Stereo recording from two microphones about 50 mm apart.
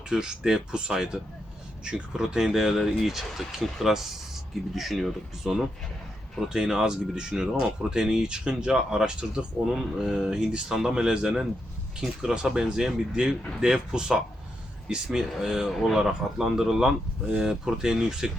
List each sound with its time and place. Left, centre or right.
0.1 s speech: centre
15.7 s speech: centre